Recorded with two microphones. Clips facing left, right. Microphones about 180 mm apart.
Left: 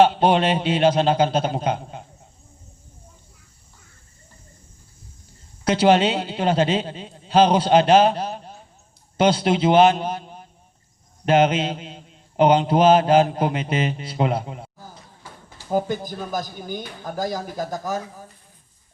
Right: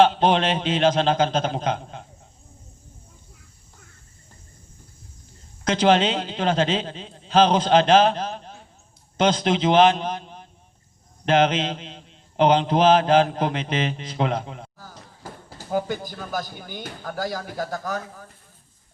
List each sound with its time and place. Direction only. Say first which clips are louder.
0.0 s a man's voice: left 1 dB; 10° left (ahead or behind)
5.6 s a man's voice: left 2 dB; 10° left (ahead or behind)
15.2 s a sound: right 8 dB; 40° right (ahead or behind)
16.1 s a man's voice: left 2 dB; 15° left (ahead or behind)